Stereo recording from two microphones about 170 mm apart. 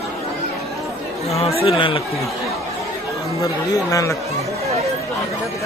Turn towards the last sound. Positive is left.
turn(degrees=20)  # may be behind; listen again after turning